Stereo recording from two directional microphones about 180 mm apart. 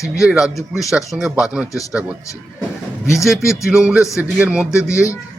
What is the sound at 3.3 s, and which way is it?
Speech, centre (ahead or behind).